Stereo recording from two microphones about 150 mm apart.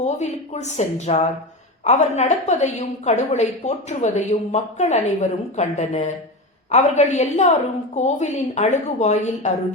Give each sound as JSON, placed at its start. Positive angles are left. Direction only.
{"t": 0.0, "sound": "a woman's voice", "side_deg": 50}